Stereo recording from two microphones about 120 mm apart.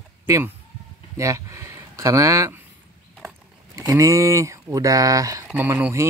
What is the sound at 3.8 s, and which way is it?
Speech, 25° right (ahead or behind).